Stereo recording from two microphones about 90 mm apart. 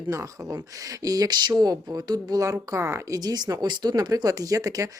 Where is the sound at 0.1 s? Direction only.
35° right (ahead or behind).